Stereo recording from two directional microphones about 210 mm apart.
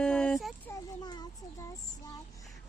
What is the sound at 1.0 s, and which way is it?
Child singing, 20° left (ahead or behind).